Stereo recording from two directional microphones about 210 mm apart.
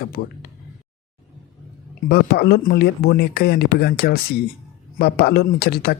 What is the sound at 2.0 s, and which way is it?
Speech, 50° left (ahead or behind).